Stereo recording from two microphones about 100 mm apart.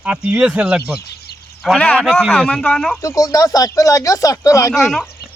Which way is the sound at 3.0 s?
35° left (ahead or behind).